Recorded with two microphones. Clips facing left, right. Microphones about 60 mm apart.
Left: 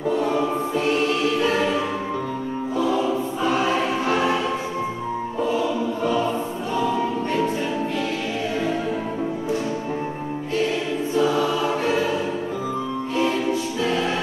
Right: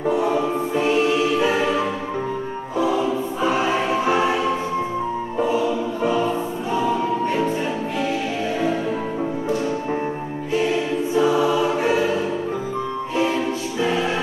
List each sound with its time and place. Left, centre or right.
0.1 s choir: centre
2.8 s choir: centre
5.4 s choir: centre
11.1 s choir: centre
13.1 s music: centre